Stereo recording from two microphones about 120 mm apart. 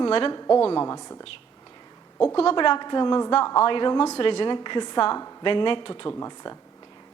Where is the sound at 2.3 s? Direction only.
45° left (ahead or behind).